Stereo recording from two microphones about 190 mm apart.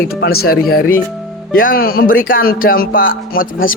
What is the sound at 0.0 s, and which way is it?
Speech, 55° left (ahead or behind).